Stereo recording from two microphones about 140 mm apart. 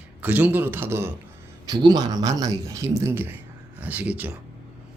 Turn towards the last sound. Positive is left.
turn(degrees=-10)  # may be behind; listen again after turning